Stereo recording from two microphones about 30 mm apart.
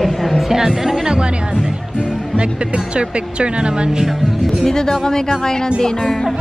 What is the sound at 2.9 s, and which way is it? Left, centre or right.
Speech, right.